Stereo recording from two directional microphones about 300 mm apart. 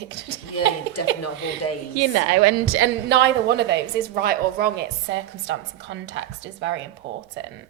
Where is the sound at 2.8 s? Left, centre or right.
Right.